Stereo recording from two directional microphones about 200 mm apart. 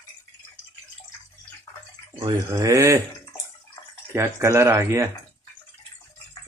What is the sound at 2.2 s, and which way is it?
Speech, 15° right (ahead or behind).